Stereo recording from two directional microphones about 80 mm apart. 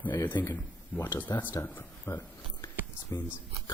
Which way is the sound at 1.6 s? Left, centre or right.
Left.